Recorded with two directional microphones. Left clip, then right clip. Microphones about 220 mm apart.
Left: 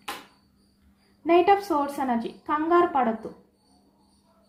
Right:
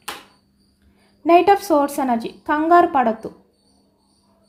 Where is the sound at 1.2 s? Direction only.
50° right (ahead or behind).